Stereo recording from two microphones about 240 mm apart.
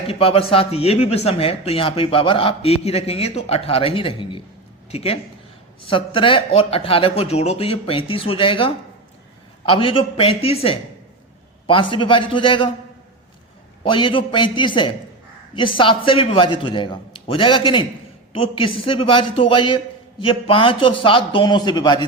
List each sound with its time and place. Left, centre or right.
0.1 s speech: left
13.8 s speech: left